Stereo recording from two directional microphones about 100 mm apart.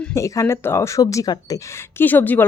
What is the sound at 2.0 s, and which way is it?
Speech, 20° left (ahead or behind).